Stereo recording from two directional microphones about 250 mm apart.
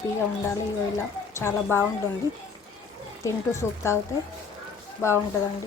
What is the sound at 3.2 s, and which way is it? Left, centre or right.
Speech, centre.